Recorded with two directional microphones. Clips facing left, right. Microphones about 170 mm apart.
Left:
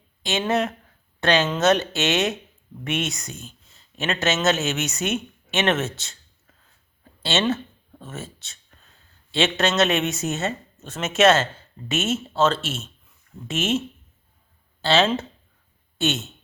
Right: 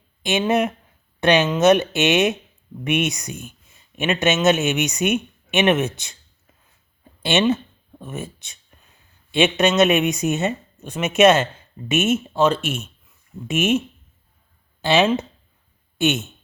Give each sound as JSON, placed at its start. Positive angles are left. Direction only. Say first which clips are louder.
{"t": 0.2, "sound": "speech", "louder": "right 4 dB", "side_deg": -15}
{"t": 7.2, "sound": "a sound", "louder": "right 4 dB", "side_deg": -15}
{"t": 9.3, "sound": "speech", "louder": "right 4 dB", "side_deg": -15}